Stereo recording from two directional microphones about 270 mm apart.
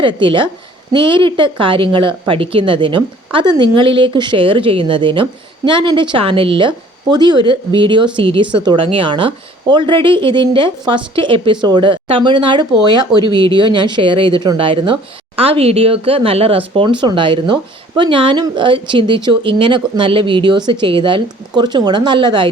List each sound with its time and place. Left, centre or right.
0.0 s a woman's voice: centre